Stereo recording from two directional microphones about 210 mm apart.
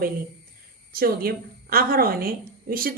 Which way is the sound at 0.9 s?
45° right (ahead or behind).